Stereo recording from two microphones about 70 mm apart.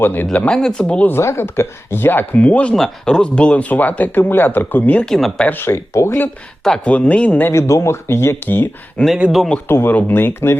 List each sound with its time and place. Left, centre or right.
0.0 s speech: left
0.5 s speech: centre
1.0 s speech: left; by 2.7 s centre
2.7 s speech: centre; by 5.0 s left
5.0 s speech: centre
5.5 s speech: left
6.8 s speech: centre
7.5 s speech: left
9.0 s speech: centre
9.6 s speech: left